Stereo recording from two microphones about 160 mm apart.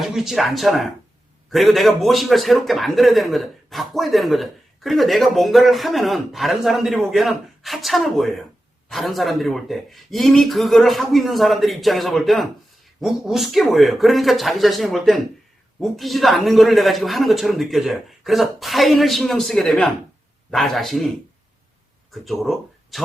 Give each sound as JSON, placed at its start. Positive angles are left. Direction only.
{"t": 0.0, "sound": "a man's voice", "side_deg": 0}
{"t": 22.1, "sound": "speech", "side_deg": 0}